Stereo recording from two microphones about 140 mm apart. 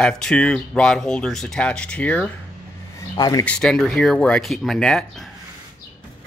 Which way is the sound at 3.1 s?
30° left (ahead or behind).